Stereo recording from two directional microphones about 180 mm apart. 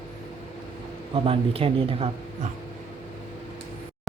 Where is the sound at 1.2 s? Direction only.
30° right (ahead or behind).